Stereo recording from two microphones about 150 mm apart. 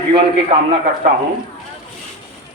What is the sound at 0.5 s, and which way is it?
Speech, 40° right (ahead or behind).